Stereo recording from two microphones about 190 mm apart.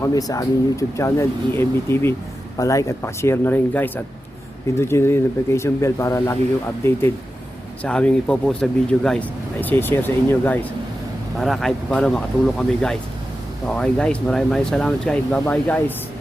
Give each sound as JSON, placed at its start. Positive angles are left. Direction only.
{"t": 0.0, "sound": "speech", "side_deg": 20}
{"t": 7.8, "sound": "speech", "side_deg": 5}